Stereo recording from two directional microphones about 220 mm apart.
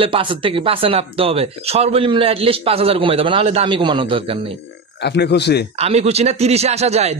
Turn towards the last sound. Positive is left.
turn(degrees=-30)  # may be behind; listen again after turning